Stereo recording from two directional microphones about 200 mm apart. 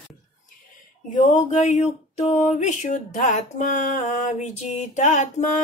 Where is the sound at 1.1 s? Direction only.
40° left (ahead or behind).